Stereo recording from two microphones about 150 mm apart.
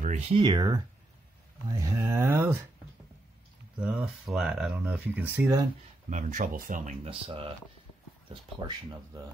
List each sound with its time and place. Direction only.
0.0 s speech: 45° right (ahead or behind); by 2.5 s 15° right (ahead or behind)
3.8 s speech: 5° right (ahead or behind)
6.0 s speech: 55° right (ahead or behind)
7.1 s speech: 35° right (ahead or behind)